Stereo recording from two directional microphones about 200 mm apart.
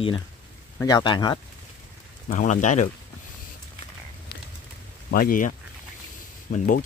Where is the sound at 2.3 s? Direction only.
40° left (ahead or behind).